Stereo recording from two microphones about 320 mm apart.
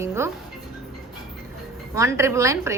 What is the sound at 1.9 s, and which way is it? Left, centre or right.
Speech, centre.